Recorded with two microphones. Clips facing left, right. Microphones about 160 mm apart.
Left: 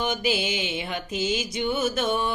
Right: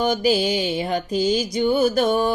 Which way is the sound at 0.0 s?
35° right (ahead or behind).